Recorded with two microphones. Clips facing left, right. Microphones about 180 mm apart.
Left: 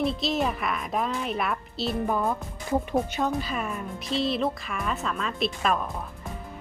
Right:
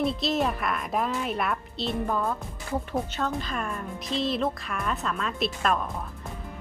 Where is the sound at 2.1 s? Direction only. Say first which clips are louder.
Left 2 dB; 15° left (ahead or behind).